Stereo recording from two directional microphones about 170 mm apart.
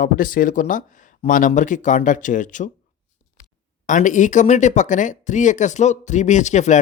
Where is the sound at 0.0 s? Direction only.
55° left (ahead or behind).